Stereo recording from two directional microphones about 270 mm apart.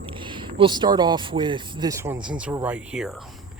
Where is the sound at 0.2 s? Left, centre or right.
Centre.